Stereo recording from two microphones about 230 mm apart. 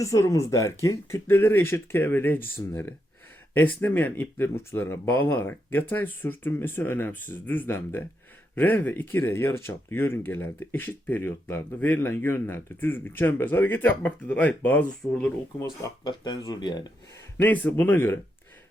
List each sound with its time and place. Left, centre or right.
0.0 s speech: centre
15.8 s speech: centre
17.3 s speech: centre